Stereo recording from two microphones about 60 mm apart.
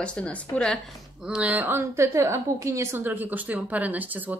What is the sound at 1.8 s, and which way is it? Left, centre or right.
A woman's voice, right.